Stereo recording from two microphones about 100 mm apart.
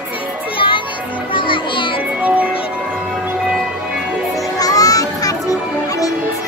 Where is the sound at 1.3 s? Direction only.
55° left (ahead or behind).